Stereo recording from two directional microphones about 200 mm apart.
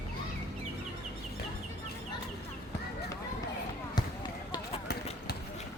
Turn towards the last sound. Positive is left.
turn(degrees=20)  # may be behind; listen again after turning